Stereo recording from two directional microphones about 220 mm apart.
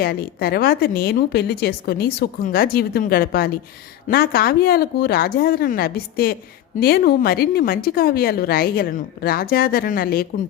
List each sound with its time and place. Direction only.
0.0 s speech: 45° left (ahead or behind)